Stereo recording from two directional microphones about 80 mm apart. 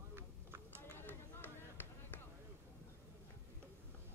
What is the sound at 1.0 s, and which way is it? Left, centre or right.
Run, left.